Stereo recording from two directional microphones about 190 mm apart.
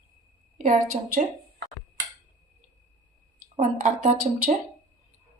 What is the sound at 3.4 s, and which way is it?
Speech, 45° right (ahead or behind).